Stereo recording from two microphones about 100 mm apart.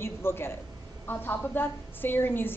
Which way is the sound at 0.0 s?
25° left (ahead or behind).